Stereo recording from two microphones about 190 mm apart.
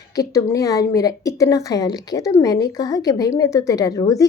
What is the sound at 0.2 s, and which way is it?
Speech, 15° left (ahead or behind).